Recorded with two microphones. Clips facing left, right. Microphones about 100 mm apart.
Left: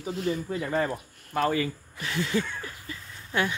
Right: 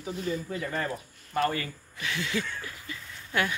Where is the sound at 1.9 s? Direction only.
40° left (ahead or behind).